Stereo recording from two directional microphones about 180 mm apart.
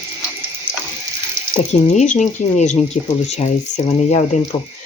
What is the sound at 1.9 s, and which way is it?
Speech, 40° left (ahead or behind).